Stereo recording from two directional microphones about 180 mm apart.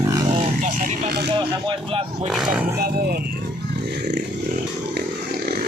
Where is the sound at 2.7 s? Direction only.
60° right (ahead or behind).